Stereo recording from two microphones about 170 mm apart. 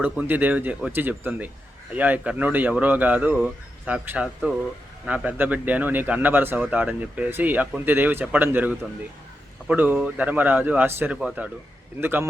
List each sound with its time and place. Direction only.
0.0 s speech: 10° right (ahead or behind)